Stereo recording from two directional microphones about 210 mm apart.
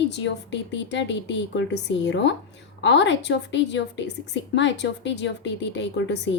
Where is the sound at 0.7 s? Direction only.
55° left (ahead or behind).